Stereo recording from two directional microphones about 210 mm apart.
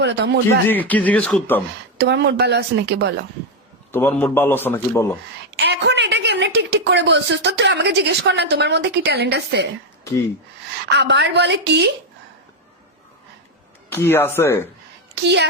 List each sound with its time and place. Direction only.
0.0 s speech: 55° right (ahead or behind)
0.7 s a man's voice: 10° left (ahead or behind)
2.0 s speech: 55° right (ahead or behind)
3.9 s a man's voice: 10° left (ahead or behind)
5.5 s a woman's voice: 55° right (ahead or behind)
10.8 s speech: 55° right (ahead or behind)
13.9 s a man's voice: 10° left (ahead or behind)
15.1 s a woman's voice: 55° right (ahead or behind)